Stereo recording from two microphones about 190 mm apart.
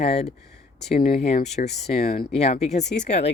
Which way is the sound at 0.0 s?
35° left (ahead or behind).